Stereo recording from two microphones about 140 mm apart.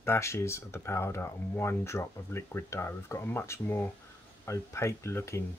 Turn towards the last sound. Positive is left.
turn(degrees=20)  # may be behind; listen again after turning